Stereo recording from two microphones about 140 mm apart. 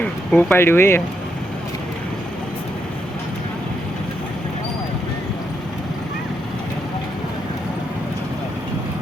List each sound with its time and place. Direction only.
0.0 s speech: 10° left (ahead or behind)